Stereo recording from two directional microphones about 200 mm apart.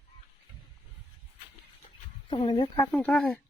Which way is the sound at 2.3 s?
25° left (ahead or behind).